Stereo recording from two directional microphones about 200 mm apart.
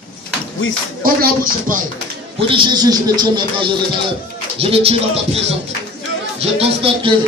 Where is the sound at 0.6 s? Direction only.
75° left (ahead or behind).